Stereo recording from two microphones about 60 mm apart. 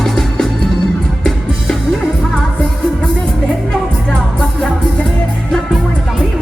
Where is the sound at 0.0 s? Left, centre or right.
Centre.